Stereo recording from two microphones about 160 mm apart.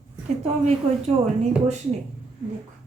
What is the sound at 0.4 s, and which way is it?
Speech, 45° right (ahead or behind).